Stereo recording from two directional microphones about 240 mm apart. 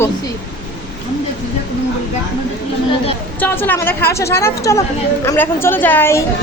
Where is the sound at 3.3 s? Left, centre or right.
Centre.